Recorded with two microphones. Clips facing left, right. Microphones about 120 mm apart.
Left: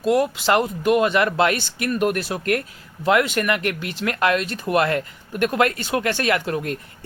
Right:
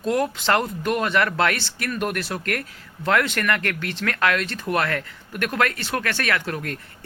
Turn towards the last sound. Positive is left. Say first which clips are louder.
# left 4 dB
turn(degrees=20)  # may be behind; listen again after turning